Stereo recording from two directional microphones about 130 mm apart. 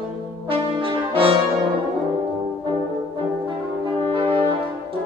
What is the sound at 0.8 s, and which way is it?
Brass instrument, 45° right (ahead or behind).